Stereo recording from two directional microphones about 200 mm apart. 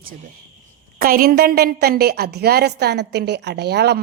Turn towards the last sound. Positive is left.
turn(degrees=-55)  # may be behind; listen again after turning